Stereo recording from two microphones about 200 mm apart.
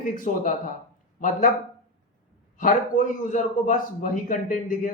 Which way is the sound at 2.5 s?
40° left (ahead or behind).